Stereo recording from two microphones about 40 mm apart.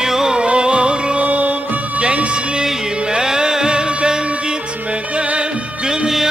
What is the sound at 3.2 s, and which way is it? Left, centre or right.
Music, centre.